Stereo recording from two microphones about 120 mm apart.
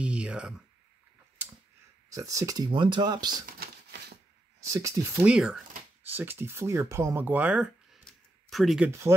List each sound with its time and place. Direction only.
0.0 s a sound: 10° right (ahead or behind)
2.0 s speech: 25° right (ahead or behind)
4.6 s speech: 25° right (ahead or behind)
5.2 s speech: 5° right (ahead or behind)
6.0 s speech: 15° right (ahead or behind)
8.0 s a sound: centre (ahead or behind)